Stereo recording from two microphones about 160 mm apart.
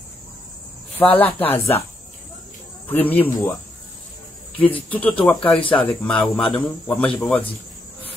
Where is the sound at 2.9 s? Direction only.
10° left (ahead or behind).